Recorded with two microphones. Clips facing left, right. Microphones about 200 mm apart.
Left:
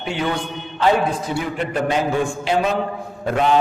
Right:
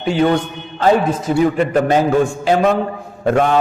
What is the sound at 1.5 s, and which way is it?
A man's voice, 50° right (ahead or behind).